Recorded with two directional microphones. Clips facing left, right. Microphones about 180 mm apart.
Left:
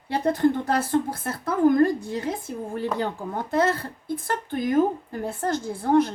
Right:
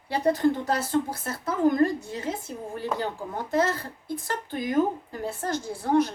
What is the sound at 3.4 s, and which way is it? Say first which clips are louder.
Speech: left 2 dB; 55° left (ahead or behind).